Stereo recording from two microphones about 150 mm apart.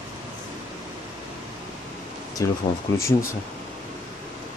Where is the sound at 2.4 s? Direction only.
25° left (ahead or behind).